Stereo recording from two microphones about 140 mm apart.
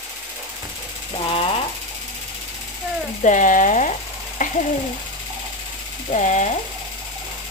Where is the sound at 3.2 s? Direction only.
65° left (ahead or behind).